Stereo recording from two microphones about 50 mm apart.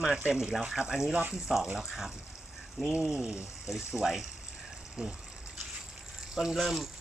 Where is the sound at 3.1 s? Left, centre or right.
Centre.